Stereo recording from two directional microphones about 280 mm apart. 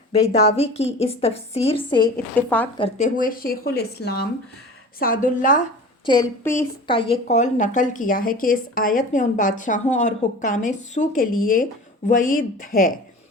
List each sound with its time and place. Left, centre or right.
0.1 s a woman's voice: left
1.8 s a woman's voice: centre
2.7 s a woman's voice: left
6.1 s a woman's voice: centre; by 13.0 s left